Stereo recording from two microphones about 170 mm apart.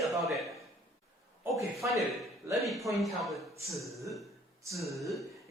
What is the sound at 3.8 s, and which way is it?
Speech, 20° right (ahead or behind).